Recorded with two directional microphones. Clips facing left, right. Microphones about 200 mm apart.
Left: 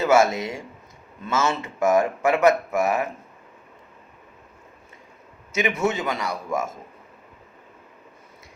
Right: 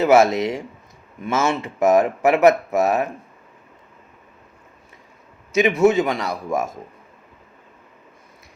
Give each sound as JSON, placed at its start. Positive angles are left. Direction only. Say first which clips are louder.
{"t": 0.0, "sound": "speech", "louder": "right 4 dB", "side_deg": -20}
{"t": 5.8, "sound": "speech", "louder": "right 8 dB", "side_deg": -15}